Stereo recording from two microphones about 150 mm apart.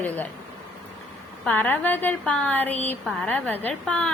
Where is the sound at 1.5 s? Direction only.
10° left (ahead or behind).